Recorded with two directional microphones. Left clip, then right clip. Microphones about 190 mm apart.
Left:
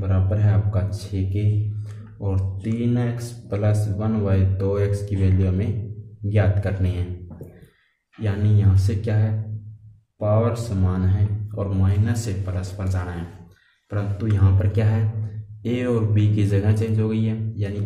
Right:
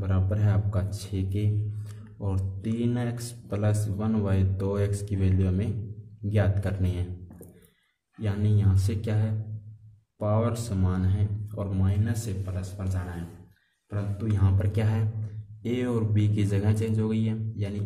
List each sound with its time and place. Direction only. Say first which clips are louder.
0.0 s speech: left 5 dB; 30° right (ahead or behind)
8.2 s speech: left 5 dB; 25° right (ahead or behind)